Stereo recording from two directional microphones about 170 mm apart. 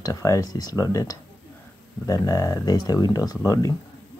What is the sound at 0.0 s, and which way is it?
Speech, 20° left (ahead or behind).